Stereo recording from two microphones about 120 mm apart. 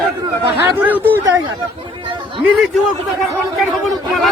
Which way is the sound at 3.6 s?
Centre (ahead or behind).